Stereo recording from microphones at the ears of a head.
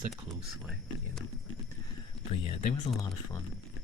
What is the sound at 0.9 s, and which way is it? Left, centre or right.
Speech, left.